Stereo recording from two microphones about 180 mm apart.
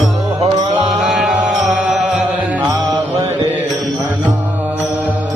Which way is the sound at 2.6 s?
20° right (ahead or behind).